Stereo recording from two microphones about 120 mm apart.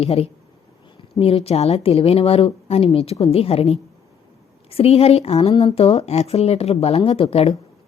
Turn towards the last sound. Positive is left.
turn(degrees=55)  # may be behind; listen again after turning